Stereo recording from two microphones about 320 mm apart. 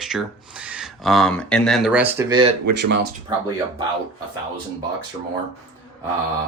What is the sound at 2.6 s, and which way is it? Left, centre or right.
Speech, right.